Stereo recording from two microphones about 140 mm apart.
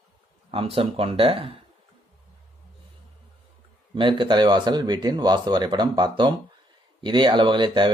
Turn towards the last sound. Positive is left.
turn(degrees=-35)  # may be behind; listen again after turning